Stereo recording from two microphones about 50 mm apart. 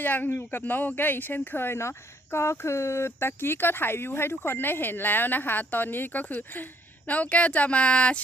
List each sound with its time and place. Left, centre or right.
0.0 s speech: left
1.8 s speech: left
7.1 s speech: left